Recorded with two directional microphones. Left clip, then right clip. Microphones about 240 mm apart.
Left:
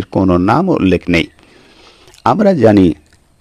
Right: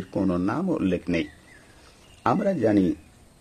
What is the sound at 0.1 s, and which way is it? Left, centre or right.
Speech, left.